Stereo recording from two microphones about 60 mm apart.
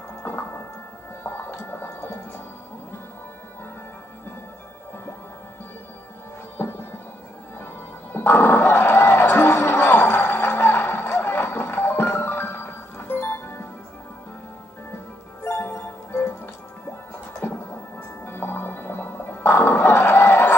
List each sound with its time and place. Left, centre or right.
0.2 s music: left
6.6 s music: left
15.4 s music: left
17.4 s music: left